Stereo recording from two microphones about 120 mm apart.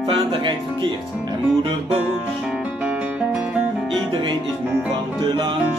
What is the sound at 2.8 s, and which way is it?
Music, 10° right (ahead or behind).